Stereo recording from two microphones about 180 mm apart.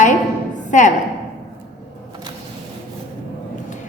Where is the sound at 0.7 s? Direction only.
45° left (ahead or behind).